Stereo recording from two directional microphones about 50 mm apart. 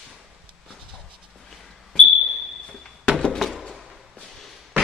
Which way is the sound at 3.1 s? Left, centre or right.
Centre.